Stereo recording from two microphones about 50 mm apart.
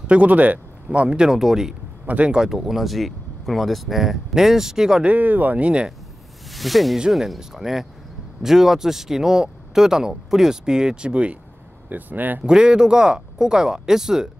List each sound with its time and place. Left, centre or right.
0.0 s speech: right; by 1.8 s centre
2.0 s speech: right
2.3 s speech: centre
5.0 s speech: right
5.7 s speech: right
6.5 s speech: centre; by 11.3 s right
11.9 s speech: right
12.4 s speech: centre